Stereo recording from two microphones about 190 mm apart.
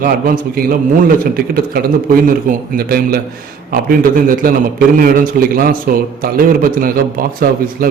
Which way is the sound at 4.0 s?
50° right (ahead or behind).